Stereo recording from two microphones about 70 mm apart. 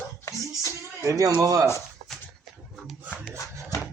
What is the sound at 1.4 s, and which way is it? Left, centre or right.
Speech, right.